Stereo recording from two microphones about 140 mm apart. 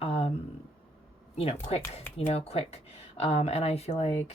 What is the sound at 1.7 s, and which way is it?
A woman's voice, 45° left (ahead or behind).